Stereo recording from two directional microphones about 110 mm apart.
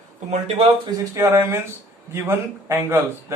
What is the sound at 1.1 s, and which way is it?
Speech, 25° right (ahead or behind).